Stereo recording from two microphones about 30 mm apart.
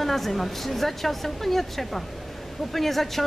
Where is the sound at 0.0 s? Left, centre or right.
Centre.